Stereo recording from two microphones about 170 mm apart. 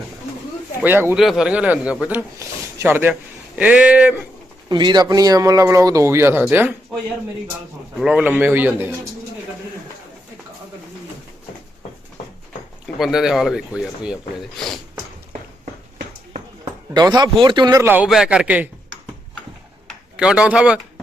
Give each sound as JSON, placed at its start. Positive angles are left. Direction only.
{"t": 0.8, "sound": "a man's voice", "side_deg": -10}
{"t": 4.7, "sound": "speech", "side_deg": -25}
{"t": 7.9, "sound": "a man's voice", "side_deg": -5}
{"t": 13.0, "sound": "speech", "side_deg": 0}
{"t": 16.9, "sound": "speech", "side_deg": -25}
{"t": 17.8, "sound": "a man's voice", "side_deg": -10}
{"t": 19.9, "sound": "speech", "side_deg": -5}